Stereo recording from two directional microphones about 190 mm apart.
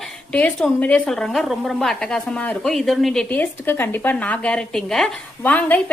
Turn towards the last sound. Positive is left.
turn(degrees=10)  # may be behind; listen again after turning